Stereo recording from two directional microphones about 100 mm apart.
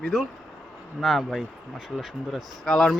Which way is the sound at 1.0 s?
Centre (ahead or behind).